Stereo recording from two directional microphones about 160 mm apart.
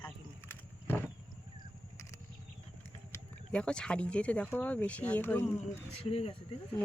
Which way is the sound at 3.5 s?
5° left (ahead or behind).